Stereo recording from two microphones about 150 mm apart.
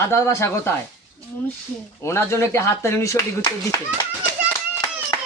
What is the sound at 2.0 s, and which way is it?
Speech, 15° left (ahead or behind).